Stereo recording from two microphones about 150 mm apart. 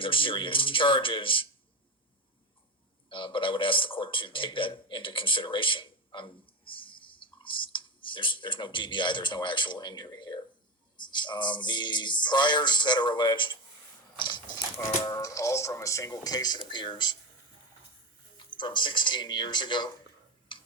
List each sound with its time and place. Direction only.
0.0 s speech: 35° left (ahead or behind)
3.1 s a man's voice: 35° left (ahead or behind)
14.2 s coin: 30° left (ahead or behind)
14.8 s speech: 25° left (ahead or behind)
18.3 s speech: 30° left (ahead or behind)
20.5 s tick-tock: 35° left (ahead or behind)